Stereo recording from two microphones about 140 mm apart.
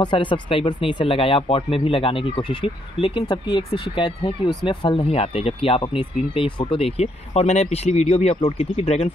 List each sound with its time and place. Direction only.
0.0 s speech: 35° left (ahead or behind)